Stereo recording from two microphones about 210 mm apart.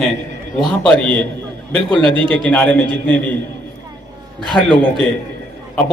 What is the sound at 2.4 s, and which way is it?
Speech, 5° left (ahead or behind).